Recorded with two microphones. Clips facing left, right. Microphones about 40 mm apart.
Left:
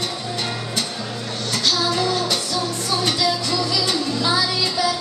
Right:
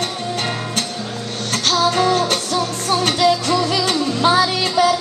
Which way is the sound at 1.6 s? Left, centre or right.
Right.